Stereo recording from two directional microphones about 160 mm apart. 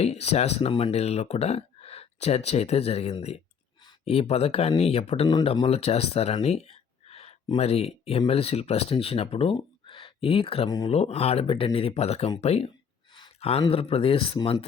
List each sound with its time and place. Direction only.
0.0 s speech: 40° left (ahead or behind)
6.4 s a sound: 40° left (ahead or behind)
7.4 s speech: 40° left (ahead or behind)